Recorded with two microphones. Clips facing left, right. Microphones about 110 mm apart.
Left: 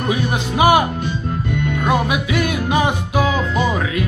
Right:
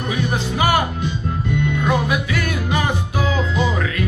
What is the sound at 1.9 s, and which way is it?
Music, 20° left (ahead or behind).